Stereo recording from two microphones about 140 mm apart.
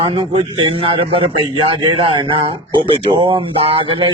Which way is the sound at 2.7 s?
40° right (ahead or behind).